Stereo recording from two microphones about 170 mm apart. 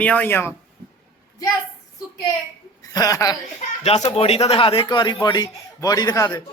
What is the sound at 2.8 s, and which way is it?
Speech, 20° left (ahead or behind).